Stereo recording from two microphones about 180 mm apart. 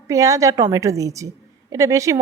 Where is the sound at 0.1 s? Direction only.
20° right (ahead or behind).